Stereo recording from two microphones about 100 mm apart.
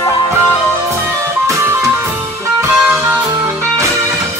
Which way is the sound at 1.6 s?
25° right (ahead or behind).